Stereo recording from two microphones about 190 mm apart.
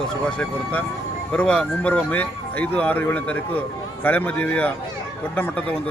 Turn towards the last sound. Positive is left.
turn(degrees=5)  # may be behind; listen again after turning